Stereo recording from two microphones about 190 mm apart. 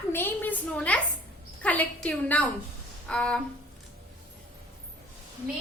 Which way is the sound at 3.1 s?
5° left (ahead or behind).